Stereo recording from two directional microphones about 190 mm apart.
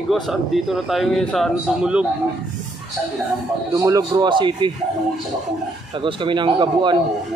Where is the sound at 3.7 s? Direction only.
20° right (ahead or behind).